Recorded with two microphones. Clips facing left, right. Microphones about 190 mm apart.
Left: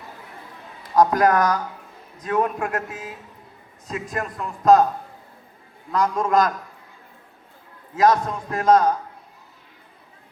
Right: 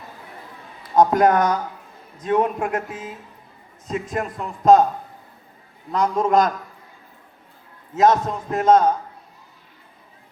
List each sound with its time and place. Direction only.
0.9 s speech: 25° right (ahead or behind)
5.9 s speech: 25° right (ahead or behind)
7.9 s speech: 25° right (ahead or behind)